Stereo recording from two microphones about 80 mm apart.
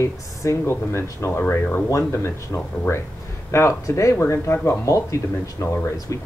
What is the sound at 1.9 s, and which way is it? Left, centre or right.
Speech, left.